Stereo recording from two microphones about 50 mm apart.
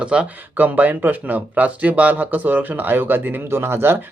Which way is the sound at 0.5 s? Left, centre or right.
Right.